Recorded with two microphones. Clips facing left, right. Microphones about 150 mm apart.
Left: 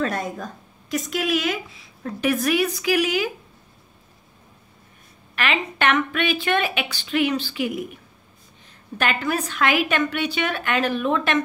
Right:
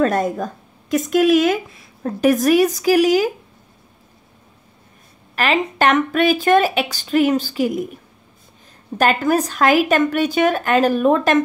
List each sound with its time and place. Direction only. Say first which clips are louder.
0.0 s speech: right 8 dB; 45° right (ahead or behind)
5.3 s speech: right 6 dB; 35° right (ahead or behind)
8.9 s speech: right 7 dB; 40° right (ahead or behind)